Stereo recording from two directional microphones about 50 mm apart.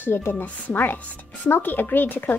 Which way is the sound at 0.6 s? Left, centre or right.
Left.